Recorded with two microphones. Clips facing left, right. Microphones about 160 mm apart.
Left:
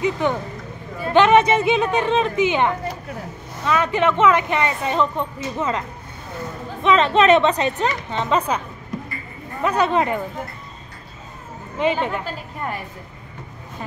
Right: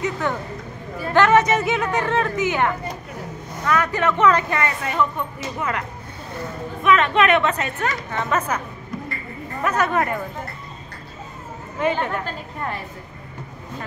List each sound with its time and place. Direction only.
0.0 s speech: 20° left (ahead or behind)
9.6 s speech: 20° left (ahead or behind)
11.8 s a woman's voice: 20° left (ahead or behind)